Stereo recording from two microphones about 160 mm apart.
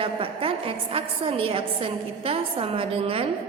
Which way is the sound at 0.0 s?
35° right (ahead or behind).